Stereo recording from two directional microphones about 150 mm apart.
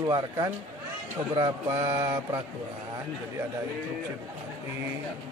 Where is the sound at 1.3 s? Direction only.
30° right (ahead or behind).